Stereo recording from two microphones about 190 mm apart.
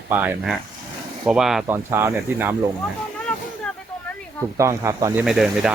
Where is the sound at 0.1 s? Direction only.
10° right (ahead or behind).